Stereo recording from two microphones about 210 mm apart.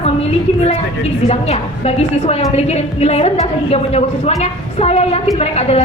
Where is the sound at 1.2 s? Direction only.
30° left (ahead or behind).